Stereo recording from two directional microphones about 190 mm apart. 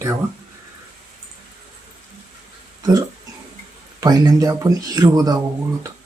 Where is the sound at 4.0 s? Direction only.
20° right (ahead or behind).